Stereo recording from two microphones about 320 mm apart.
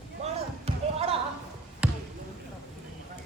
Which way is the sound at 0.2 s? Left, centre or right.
Centre.